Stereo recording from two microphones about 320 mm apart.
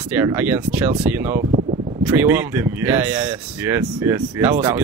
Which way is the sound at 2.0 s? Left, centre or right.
Centre.